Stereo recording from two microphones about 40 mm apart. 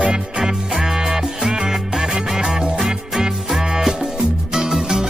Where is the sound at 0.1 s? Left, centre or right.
Centre.